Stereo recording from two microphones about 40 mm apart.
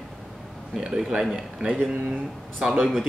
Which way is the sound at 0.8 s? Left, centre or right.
Right.